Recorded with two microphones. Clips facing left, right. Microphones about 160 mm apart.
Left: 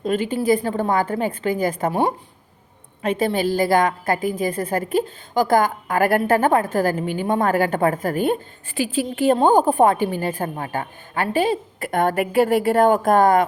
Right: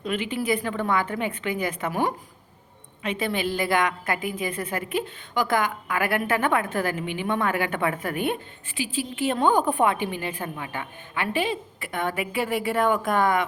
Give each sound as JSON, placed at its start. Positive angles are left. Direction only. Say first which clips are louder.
{"t": 0.0, "sound": "a woman's voice", "louder": "left 6 dB", "side_deg": 40}
{"t": 3.0, "sound": "a woman's voice", "louder": "left 6 dB", "side_deg": 45}